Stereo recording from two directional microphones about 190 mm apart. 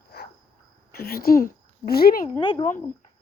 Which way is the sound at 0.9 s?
55° left (ahead or behind).